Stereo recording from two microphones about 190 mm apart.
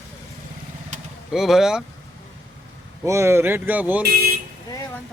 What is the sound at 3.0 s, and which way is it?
A man's voice, 15° right (ahead or behind).